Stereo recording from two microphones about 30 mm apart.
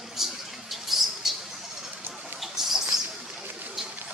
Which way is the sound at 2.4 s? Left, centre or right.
Centre.